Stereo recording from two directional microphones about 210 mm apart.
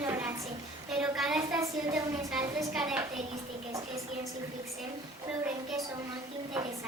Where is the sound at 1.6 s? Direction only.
15° right (ahead or behind).